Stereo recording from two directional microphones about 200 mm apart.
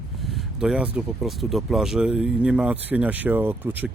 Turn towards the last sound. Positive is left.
turn(degrees=-10)  # may be behind; listen again after turning